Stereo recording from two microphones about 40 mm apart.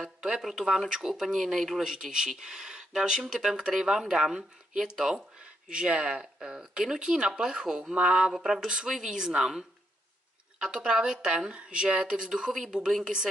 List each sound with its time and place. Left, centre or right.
0.0 s a sound: centre
0.4 s speech: centre
0.8 s speech: centre
1.8 s speech: centre
5.4 s speech: right
8.8 s speech: centre